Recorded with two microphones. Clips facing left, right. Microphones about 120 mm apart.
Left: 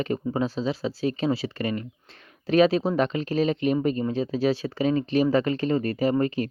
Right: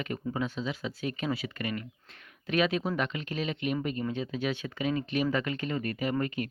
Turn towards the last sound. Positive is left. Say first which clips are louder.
# left 7 dB
turn(degrees=35)  # may be behind; listen again after turning